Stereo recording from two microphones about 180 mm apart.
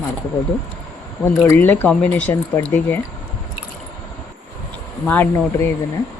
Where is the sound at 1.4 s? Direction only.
10° left (ahead or behind).